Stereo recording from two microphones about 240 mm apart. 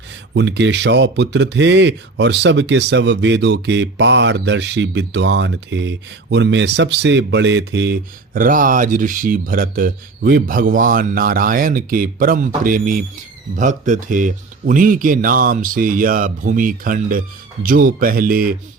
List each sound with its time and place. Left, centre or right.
0.3 s speech: right
8.3 s speech: right